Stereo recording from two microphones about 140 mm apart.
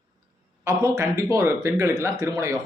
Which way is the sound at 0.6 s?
20° right (ahead or behind).